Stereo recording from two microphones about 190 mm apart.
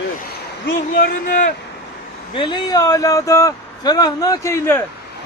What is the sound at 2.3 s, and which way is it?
Speech, 25° left (ahead or behind).